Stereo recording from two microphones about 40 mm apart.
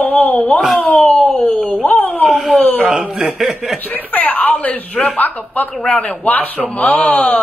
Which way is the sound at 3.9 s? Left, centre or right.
Left.